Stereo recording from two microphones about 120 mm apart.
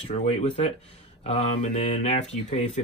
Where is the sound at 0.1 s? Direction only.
65° left (ahead or behind).